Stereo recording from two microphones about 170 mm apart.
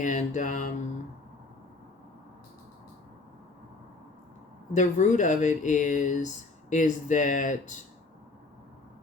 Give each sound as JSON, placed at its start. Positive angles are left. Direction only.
{"t": 0.0, "sound": "speech", "side_deg": 45}
{"t": 4.7, "sound": "speech", "side_deg": 45}